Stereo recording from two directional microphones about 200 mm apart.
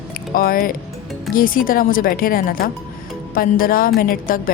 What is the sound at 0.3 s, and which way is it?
Speech, 45° left (ahead or behind).